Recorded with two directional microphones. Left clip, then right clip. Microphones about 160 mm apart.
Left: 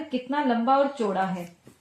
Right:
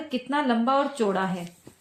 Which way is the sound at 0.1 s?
55° right (ahead or behind).